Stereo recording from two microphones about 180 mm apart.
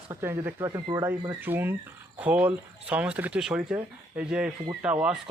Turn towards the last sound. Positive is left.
turn(degrees=-5)  # may be behind; listen again after turning